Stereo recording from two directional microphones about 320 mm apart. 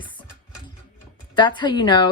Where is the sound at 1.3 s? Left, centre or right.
Centre.